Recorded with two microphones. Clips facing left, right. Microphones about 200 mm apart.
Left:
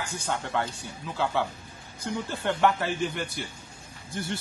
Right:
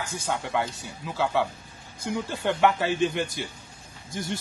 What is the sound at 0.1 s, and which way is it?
A man's voice, 10° right (ahead or behind).